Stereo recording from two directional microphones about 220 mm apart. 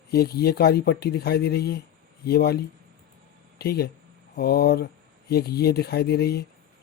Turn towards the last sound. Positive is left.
turn(degrees=45)  # may be behind; listen again after turning